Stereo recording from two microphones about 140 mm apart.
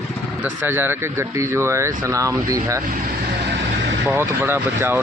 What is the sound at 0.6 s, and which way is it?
Speech, 15° right (ahead or behind).